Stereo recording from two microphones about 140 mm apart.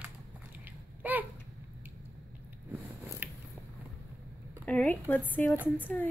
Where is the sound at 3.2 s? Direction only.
15° right (ahead or behind).